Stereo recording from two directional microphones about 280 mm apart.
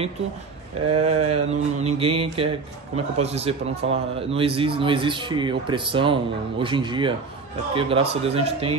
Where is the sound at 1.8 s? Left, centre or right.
Centre.